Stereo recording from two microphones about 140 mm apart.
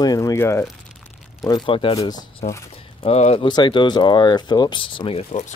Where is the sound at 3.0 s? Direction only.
45° left (ahead or behind).